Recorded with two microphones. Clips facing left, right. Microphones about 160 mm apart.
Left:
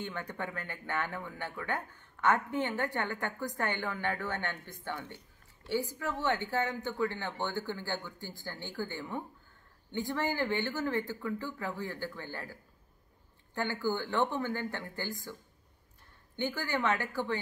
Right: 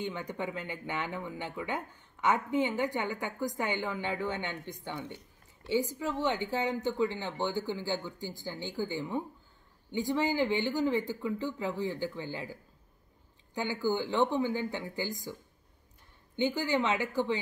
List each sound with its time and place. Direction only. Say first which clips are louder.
0.0 s speech: right 3 dB; 15° right (ahead or behind)
13.6 s speech: right 2 dB; 15° right (ahead or behind)
16.3 s speech: right 5 dB; 15° right (ahead or behind)